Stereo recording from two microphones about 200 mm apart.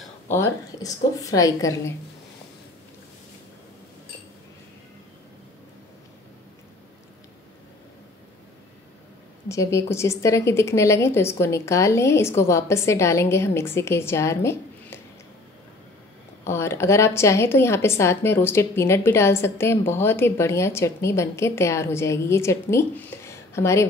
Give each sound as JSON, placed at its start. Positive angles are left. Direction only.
{"t": 0.3, "sound": "a woman's voice", "side_deg": 15}
{"t": 9.5, "sound": "a woman's voice", "side_deg": 15}
{"t": 16.4, "sound": "a woman's voice", "side_deg": 15}